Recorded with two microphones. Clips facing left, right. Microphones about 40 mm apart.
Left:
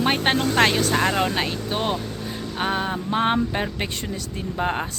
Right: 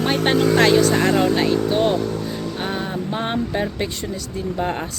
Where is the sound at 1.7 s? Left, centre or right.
Centre.